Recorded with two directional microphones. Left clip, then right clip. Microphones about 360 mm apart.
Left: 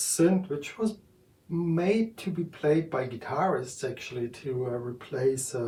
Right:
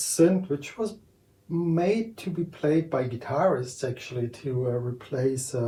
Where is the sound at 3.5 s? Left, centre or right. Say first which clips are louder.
Right 1 dB; centre.